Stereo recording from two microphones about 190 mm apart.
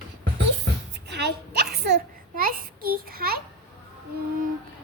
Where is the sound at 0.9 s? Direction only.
65° right (ahead or behind).